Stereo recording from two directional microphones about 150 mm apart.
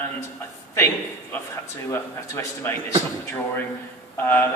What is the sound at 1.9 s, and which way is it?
Speech, 15° left (ahead or behind).